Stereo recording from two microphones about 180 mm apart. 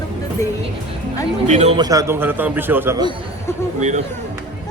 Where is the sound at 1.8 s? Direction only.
20° right (ahead or behind).